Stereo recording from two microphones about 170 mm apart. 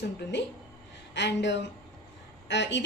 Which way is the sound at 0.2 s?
90° left.